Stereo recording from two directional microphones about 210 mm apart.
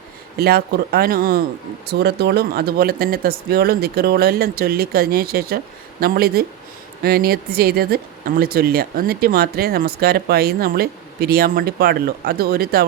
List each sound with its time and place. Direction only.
0.3 s speech: 50° right (ahead or behind)